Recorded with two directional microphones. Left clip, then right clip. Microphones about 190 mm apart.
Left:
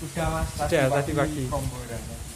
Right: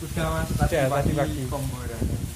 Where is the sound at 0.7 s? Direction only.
20° left (ahead or behind).